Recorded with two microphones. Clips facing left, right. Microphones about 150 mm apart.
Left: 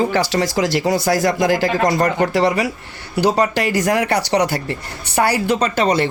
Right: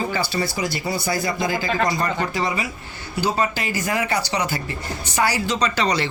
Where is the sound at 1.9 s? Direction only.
70° left (ahead or behind).